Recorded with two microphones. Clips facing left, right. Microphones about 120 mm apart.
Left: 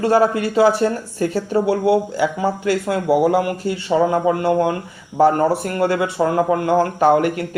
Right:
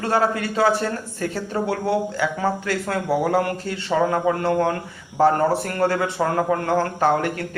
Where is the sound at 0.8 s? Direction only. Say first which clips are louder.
Left 6 dB; 35° left (ahead or behind).